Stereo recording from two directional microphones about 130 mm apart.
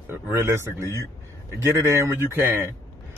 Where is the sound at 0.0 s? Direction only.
20° right (ahead or behind).